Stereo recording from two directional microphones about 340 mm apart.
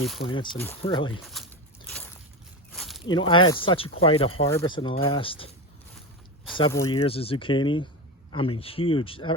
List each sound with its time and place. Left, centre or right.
0.0 s speech: centre
0.8 s speech: centre
1.2 s speech: centre
2.7 s walk: centre
3.1 s speech: centre
6.6 s speech: centre